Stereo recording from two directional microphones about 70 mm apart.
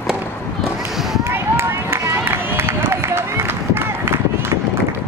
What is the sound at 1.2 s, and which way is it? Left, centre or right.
Run, right.